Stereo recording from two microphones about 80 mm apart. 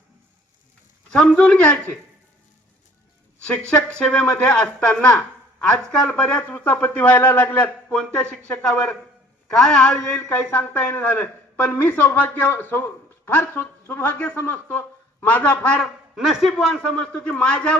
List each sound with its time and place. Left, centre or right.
1.1 s a man's voice: centre
3.4 s a man's voice: centre
10.2 s a man's voice: left
15.8 s a man's voice: centre
16.8 s a man's voice: centre